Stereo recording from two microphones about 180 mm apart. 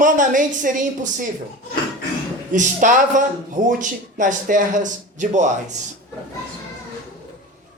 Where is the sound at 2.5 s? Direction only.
45° right (ahead or behind).